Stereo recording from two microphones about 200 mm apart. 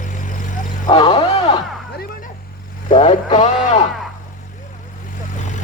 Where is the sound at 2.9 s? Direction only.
25° left (ahead or behind).